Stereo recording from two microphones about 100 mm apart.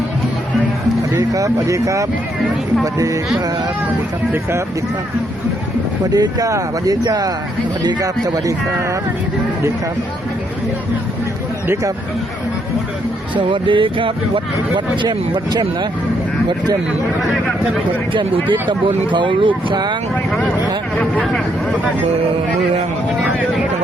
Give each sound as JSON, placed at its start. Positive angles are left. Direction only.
{"t": 1.3, "sound": "speech", "side_deg": -35}
{"t": 6.1, "sound": "speech", "side_deg": -40}
{"t": 13.5, "sound": "speech", "side_deg": -60}
{"t": 18.1, "sound": "speech", "side_deg": -55}
{"t": 21.0, "sound": "speech", "side_deg": 5}